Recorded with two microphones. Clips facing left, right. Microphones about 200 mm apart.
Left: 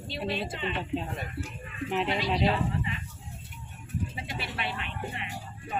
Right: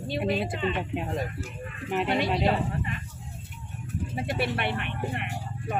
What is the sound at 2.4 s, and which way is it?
Speech, 50° right (ahead or behind).